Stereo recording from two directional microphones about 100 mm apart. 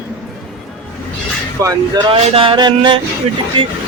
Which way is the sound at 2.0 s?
65° right (ahead or behind).